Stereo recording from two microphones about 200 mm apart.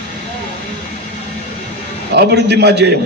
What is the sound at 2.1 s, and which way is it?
Speech, 55° right (ahead or behind).